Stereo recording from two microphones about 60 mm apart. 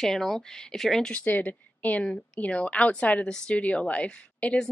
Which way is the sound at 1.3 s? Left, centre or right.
Left.